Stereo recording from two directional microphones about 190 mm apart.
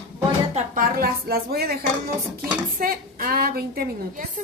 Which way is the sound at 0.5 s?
45° right (ahead or behind).